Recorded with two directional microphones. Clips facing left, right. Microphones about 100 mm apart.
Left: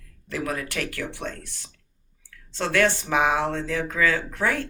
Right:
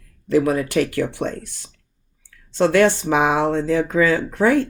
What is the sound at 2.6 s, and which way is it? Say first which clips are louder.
Speech: right 7 dB; 20° right (ahead or behind).